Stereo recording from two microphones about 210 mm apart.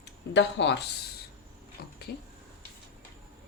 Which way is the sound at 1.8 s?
45° left (ahead or behind).